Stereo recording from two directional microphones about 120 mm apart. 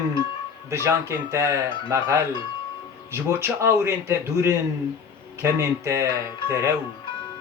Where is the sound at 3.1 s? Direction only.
20° right (ahead or behind).